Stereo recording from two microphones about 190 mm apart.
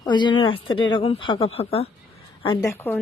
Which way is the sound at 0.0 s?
25° left (ahead or behind).